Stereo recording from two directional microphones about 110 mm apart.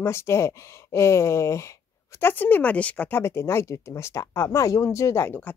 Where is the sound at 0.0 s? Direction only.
25° left (ahead or behind).